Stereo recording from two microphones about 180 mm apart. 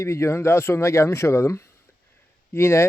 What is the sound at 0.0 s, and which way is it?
Speech, 15° left (ahead or behind).